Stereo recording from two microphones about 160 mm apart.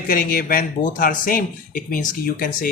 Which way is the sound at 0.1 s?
60° left (ahead or behind).